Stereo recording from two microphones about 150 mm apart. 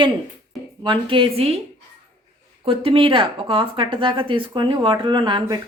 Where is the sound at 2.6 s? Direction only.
35° right (ahead or behind).